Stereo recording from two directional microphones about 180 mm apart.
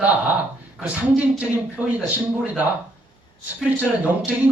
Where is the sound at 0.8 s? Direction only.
5° right (ahead or behind).